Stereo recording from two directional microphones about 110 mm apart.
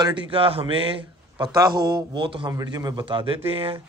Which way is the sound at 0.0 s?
50° right (ahead or behind).